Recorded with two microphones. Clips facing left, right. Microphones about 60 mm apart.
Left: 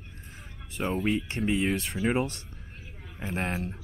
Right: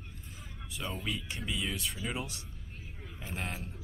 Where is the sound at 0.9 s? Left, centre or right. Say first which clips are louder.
Left 12 dB; left.